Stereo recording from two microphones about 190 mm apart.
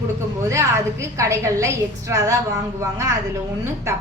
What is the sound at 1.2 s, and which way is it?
A woman's voice, 15° right (ahead or behind).